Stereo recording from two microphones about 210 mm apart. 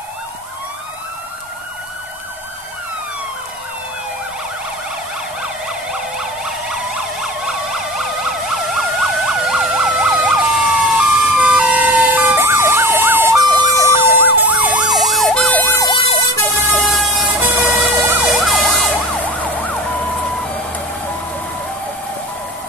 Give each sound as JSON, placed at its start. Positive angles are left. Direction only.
{"t": 5.9, "sound": "emergency vehicle", "side_deg": -5}
{"t": 16.7, "sound": "emergency vehicle", "side_deg": 0}